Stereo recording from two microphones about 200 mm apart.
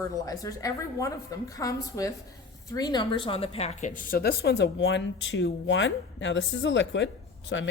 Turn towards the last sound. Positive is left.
turn(degrees=65)  # may be behind; listen again after turning